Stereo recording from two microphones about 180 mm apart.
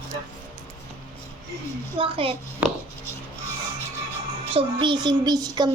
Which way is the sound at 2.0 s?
30° right (ahead or behind).